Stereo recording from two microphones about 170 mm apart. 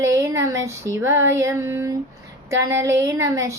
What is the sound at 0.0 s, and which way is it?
Female singing, 15° right (ahead or behind).